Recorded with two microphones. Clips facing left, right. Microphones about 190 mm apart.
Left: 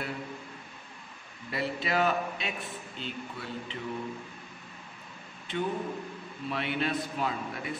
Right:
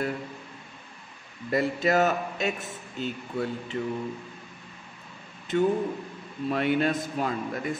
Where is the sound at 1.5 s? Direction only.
45° right (ahead or behind).